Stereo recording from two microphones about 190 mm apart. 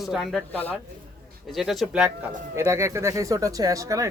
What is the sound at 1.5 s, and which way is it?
Speech, centre (ahead or behind).